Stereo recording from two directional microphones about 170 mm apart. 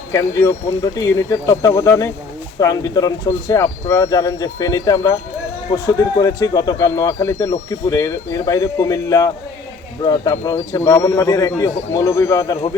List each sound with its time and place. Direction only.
0.1 s speech: 20° left (ahead or behind)